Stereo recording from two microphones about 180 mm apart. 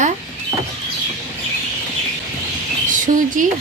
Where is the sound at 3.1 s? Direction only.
45° right (ahead or behind).